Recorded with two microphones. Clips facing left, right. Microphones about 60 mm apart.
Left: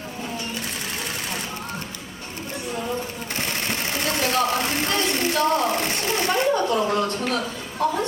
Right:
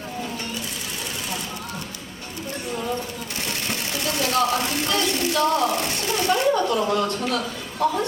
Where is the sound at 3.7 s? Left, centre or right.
Left.